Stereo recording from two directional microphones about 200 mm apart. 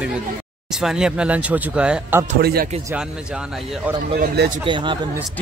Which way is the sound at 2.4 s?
50° right (ahead or behind).